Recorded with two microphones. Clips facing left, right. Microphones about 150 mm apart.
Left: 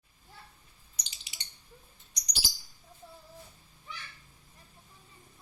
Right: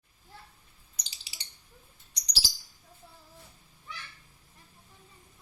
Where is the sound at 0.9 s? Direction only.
35° right (ahead or behind).